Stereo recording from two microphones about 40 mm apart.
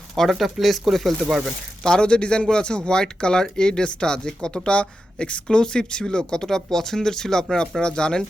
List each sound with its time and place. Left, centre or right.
0.2 s speech: centre
1.8 s speech: centre